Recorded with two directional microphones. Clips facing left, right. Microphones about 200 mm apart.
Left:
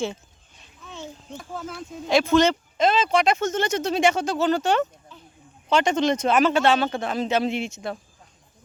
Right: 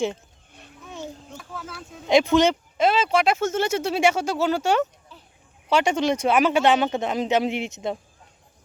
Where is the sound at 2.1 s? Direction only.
15° right (ahead or behind).